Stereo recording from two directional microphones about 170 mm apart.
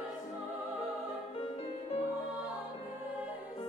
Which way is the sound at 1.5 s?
35° left (ahead or behind).